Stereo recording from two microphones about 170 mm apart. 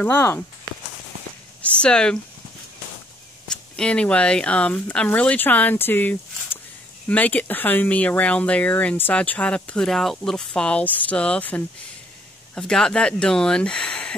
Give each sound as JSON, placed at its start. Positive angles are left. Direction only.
{"t": 0.0, "sound": "speech", "side_deg": 15}
{"t": 1.6, "sound": "a sound", "side_deg": 5}
{"t": 3.7, "sound": "speech", "side_deg": 5}